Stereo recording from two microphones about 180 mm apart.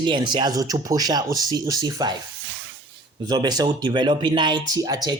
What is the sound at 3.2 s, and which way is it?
Speech, 20° right (ahead or behind).